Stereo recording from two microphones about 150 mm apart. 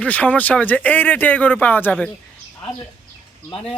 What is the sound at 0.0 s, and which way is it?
Speech, 10° left (ahead or behind).